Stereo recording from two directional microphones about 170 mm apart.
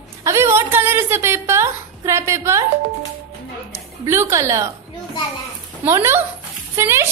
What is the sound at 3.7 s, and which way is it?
Speech, 15° right (ahead or behind).